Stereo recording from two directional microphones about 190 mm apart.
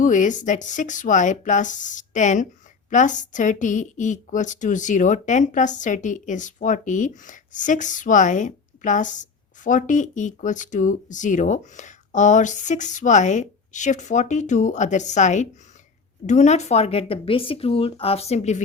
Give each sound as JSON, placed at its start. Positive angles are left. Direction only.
{"t": 0.0, "sound": "a woman's voice", "side_deg": 40}